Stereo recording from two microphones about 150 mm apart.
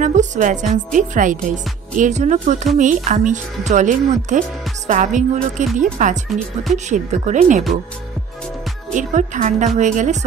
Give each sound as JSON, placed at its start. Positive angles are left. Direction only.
{"t": 0.0, "sound": "speech", "side_deg": -55}
{"t": 8.9, "sound": "speech", "side_deg": -55}